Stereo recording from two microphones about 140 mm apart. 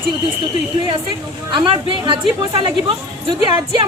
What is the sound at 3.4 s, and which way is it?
Speech, 30° right (ahead or behind).